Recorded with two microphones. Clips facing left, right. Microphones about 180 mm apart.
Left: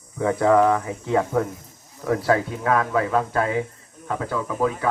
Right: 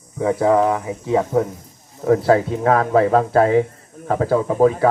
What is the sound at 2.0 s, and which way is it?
Speech, 30° right (ahead or behind).